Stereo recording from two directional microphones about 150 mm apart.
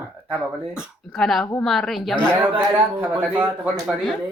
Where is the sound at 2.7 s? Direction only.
10° right (ahead or behind).